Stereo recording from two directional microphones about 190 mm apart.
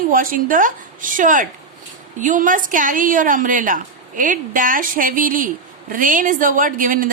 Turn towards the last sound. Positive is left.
turn(degrees=-45)  # may be behind; listen again after turning